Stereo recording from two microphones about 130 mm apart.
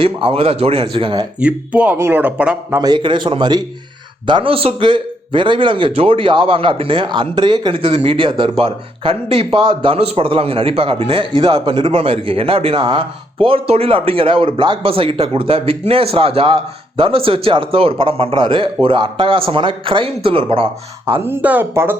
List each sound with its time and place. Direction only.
0.0 s a man's voice: 45° right (ahead or behind)
1.4 s speech: 10° right (ahead or behind)
2.8 s a man's voice: 35° right (ahead or behind)
21.2 s speech: 15° right (ahead or behind)